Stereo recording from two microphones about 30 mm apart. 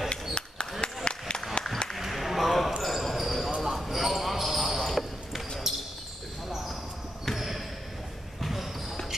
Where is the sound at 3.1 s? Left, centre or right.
Centre.